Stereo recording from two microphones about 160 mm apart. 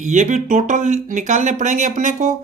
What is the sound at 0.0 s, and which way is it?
Speech, 50° right (ahead or behind).